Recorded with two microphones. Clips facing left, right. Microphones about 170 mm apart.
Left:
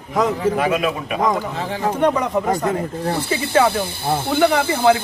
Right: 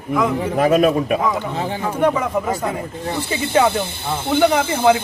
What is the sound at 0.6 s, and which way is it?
Speech, 40° right (ahead or behind).